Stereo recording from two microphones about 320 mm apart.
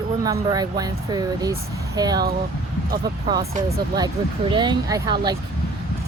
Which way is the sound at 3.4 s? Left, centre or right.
Right.